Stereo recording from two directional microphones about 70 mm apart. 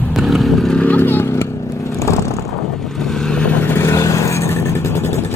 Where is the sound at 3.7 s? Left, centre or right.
Left.